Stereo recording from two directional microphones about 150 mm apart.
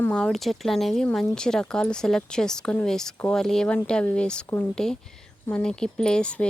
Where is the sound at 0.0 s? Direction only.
5° left (ahead or behind).